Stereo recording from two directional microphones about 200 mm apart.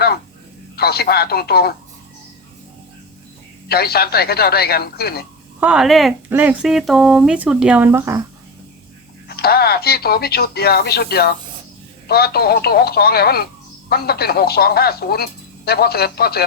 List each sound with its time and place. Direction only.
0.8 s speech: 50° left (ahead or behind)
3.7 s speech: 50° left (ahead or behind)
5.5 s speech: 5° right (ahead or behind)
9.3 s speech: 50° left (ahead or behind)